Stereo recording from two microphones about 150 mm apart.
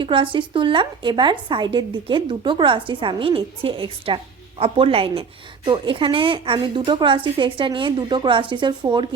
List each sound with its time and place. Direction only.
0.0 s a woman's voice: 35° right (ahead or behind)